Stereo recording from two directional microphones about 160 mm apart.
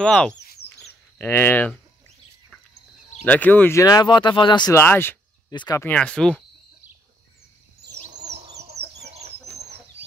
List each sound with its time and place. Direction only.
0.0 s speech: 5° left (ahead or behind)
3.3 s speech: 10° left (ahead or behind); by 4.7 s 30° left (ahead or behind)
4.7 s speech: 15° left (ahead or behind)
5.5 s speech: 25° left (ahead or behind)
5.8 s speech: 10° left (ahead or behind)
8.3 s chicken: 90° right